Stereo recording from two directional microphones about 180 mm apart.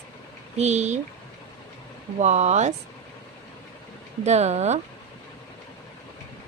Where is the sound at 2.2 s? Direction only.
40° right (ahead or behind).